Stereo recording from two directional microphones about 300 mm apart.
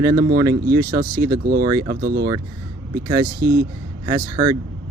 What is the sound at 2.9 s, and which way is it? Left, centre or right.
Speech, centre.